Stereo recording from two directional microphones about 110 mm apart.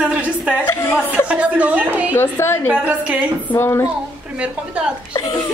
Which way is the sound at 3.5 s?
20° left (ahead or behind).